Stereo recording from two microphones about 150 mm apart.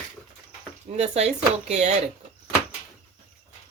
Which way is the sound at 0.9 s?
45° right (ahead or behind).